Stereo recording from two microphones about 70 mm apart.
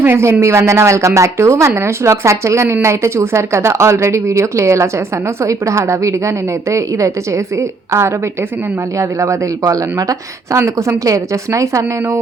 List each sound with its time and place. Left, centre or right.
0.0 s speech: right